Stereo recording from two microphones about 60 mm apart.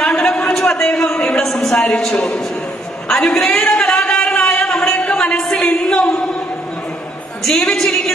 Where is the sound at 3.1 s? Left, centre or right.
Centre.